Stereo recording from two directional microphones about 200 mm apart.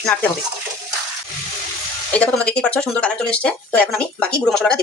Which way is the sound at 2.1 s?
5° left (ahead or behind).